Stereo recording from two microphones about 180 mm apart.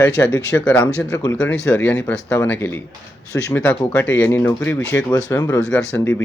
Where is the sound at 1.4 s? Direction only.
5° left (ahead or behind).